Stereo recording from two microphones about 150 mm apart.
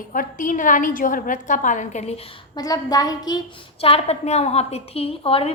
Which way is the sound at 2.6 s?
25° left (ahead or behind).